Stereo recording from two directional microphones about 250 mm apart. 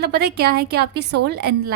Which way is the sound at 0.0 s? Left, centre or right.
Right.